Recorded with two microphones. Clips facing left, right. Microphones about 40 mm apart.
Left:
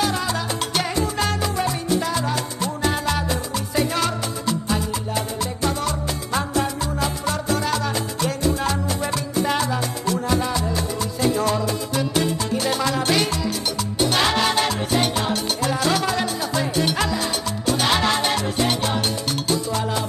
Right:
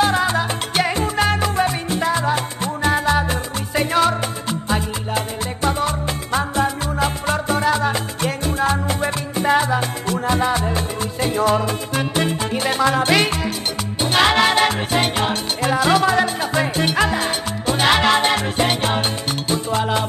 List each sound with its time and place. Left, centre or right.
0.0 s salsa music: right
13.9 s music: right